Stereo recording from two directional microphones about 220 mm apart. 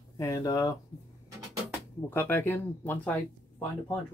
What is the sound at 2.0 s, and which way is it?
Speech, 10° left (ahead or behind).